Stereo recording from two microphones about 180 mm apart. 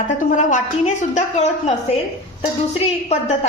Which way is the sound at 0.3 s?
40° left (ahead or behind).